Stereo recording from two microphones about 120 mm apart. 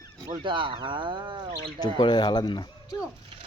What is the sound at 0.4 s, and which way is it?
Speech, 45° right (ahead or behind).